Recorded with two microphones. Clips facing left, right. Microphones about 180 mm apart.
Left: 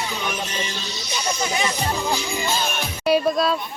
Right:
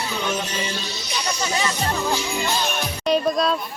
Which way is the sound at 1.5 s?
15° left (ahead or behind).